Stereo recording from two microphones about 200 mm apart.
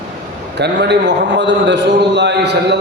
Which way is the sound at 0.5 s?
60° right (ahead or behind).